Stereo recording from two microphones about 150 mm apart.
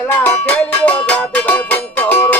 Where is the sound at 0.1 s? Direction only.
10° left (ahead or behind).